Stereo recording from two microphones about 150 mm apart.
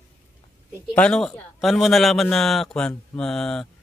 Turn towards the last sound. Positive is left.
turn(degrees=5)  # may be behind; listen again after turning